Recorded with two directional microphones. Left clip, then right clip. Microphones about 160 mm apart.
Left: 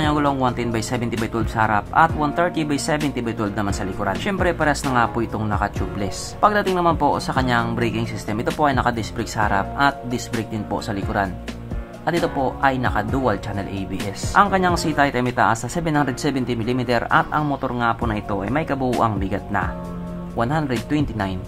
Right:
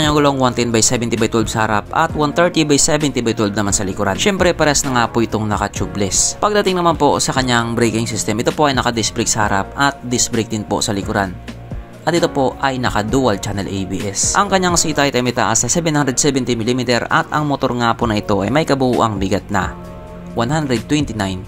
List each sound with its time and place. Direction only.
0.0 s speech: 30° right (ahead or behind)
18.9 s speech: 30° right (ahead or behind)